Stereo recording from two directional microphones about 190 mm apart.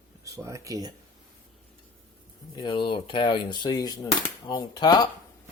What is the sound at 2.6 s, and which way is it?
Speech, 25° left (ahead or behind).